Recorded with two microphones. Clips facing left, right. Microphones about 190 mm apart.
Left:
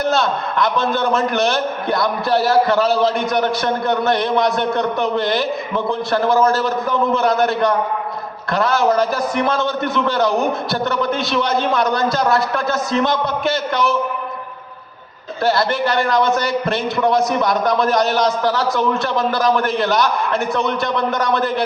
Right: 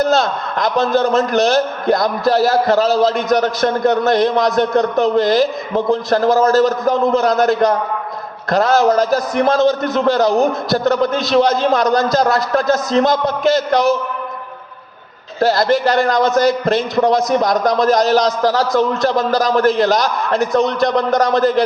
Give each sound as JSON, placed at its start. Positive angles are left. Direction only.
{"t": 0.0, "sound": "a man's voice", "side_deg": -40}
{"t": 15.4, "sound": "a man's voice", "side_deg": -40}